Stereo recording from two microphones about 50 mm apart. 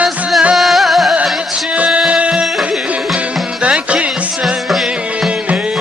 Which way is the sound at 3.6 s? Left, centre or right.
Right.